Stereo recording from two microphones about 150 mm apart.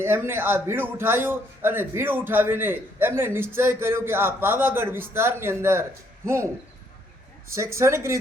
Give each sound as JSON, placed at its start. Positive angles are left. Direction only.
{"t": 0.0, "sound": "a man's voice", "side_deg": -15}
{"t": 7.5, "sound": "speech", "side_deg": -20}